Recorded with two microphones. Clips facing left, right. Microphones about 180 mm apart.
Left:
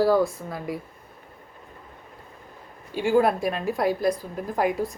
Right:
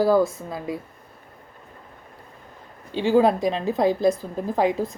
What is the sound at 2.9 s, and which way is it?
A woman's voice, 20° right (ahead or behind).